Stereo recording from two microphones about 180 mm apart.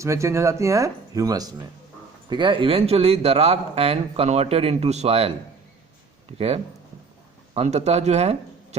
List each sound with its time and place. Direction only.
0.0 s speech: 15° right (ahead or behind); by 5.3 s 35° right (ahead or behind)
6.3 s speech: 35° right (ahead or behind)